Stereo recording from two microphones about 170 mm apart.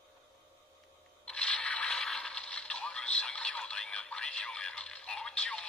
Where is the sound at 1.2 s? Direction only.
5° left (ahead or behind).